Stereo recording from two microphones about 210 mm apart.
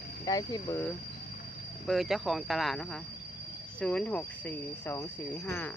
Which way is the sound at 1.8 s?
Centre (ahead or behind).